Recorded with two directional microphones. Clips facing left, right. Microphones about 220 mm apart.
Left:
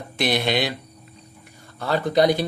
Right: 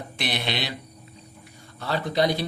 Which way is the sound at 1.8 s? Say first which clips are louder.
Left 5 dB; 50° left (ahead or behind).